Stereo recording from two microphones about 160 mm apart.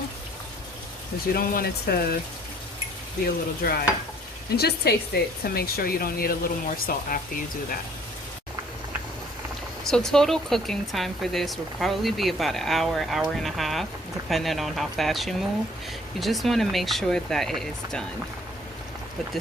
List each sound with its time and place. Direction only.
1.3 s speech: 70° left (ahead or behind)
3.2 s speech: 70° left (ahead or behind)
4.5 s speech: 85° left; by 7.4 s 60° left (ahead or behind)
9.8 s speech: 5° left (ahead or behind)